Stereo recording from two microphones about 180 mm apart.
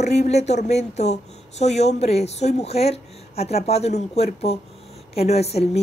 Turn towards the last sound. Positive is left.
turn(degrees=35)  # may be behind; listen again after turning